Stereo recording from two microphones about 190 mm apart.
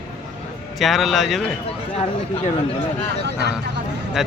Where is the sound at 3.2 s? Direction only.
65° right (ahead or behind).